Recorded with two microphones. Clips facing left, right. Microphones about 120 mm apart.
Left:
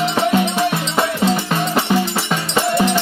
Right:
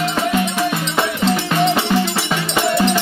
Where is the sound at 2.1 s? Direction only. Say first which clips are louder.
Even; centre (ahead or behind).